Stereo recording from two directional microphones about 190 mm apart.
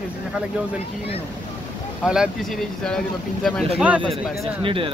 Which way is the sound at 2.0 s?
Centre (ahead or behind).